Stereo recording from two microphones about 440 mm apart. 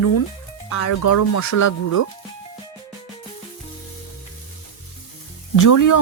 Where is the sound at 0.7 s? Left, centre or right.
Left.